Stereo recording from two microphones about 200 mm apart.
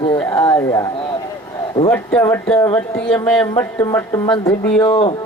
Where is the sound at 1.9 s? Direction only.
15° left (ahead or behind).